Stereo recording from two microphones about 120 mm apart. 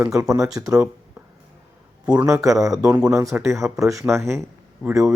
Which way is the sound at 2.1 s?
25° right (ahead or behind).